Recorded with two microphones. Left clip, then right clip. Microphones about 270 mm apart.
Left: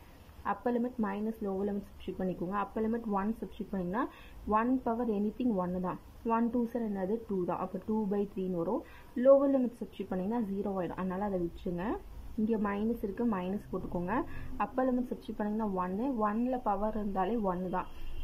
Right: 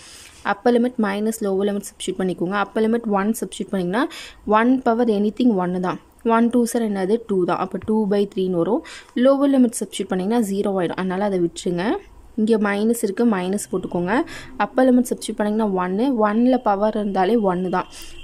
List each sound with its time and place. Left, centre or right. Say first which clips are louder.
0.4 s speech: right 15 dB; right